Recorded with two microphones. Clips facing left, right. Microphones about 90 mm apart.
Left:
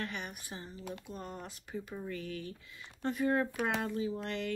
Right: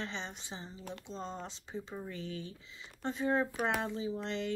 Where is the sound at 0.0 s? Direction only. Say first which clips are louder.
Left 1 dB; 25° right (ahead or behind).